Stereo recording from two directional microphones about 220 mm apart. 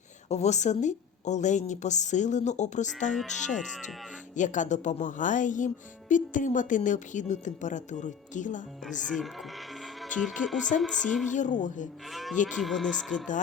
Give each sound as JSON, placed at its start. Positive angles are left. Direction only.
{"t": 0.3, "sound": "a woman's voice", "side_deg": 30}
{"t": 9.0, "sound": "speech", "side_deg": 0}
{"t": 10.0, "sound": "music", "side_deg": 0}
{"t": 10.8, "sound": "speech", "side_deg": 0}
{"t": 11.3, "sound": "a woman's voice", "side_deg": 35}
{"t": 12.1, "sound": "speech", "side_deg": 0}